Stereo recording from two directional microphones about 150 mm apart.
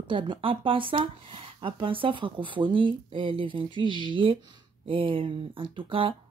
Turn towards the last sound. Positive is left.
turn(degrees=-35)  # may be behind; listen again after turning